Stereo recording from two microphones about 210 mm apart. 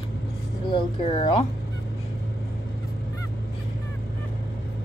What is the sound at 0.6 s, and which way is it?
Speech, 25° left (ahead or behind).